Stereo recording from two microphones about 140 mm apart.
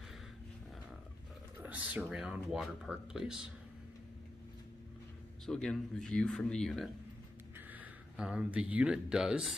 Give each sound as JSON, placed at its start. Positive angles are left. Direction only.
{"t": 1.6, "sound": "speech", "side_deg": -10}
{"t": 5.4, "sound": "speech", "side_deg": 5}
{"t": 7.5, "sound": "speech", "side_deg": -10}